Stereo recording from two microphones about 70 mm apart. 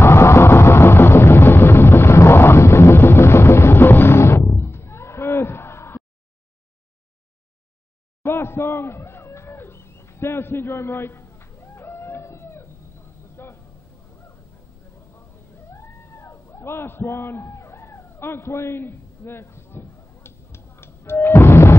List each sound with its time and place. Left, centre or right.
0.0 s vehicle: left
8.2 s a sound: left
15.7 s cat: left